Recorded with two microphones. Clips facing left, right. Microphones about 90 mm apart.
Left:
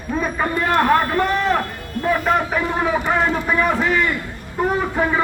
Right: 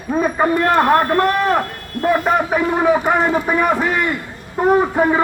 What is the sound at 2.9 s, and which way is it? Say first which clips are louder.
A man's voice: right 5 dB; 15° right (ahead or behind).